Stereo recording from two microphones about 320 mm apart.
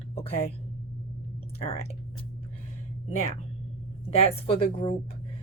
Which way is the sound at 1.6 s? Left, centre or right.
Centre.